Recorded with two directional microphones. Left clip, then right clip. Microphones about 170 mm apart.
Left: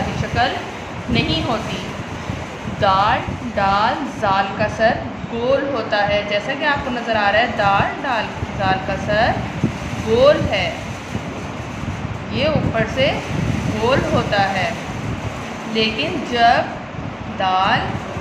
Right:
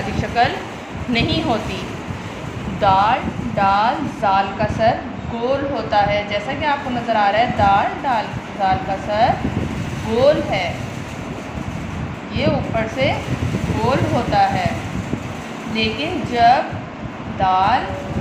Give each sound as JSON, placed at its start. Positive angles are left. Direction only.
{"t": 0.4, "sound": "speech", "side_deg": -30}
{"t": 2.8, "sound": "a woman's voice", "side_deg": -10}
{"t": 12.4, "sound": "a woman's voice", "side_deg": 0}
{"t": 14.3, "sound": "a woman's voice", "side_deg": 0}
{"t": 15.7, "sound": "a woman's voice", "side_deg": 0}